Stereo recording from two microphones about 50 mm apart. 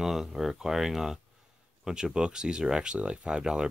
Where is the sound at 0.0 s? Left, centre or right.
Centre.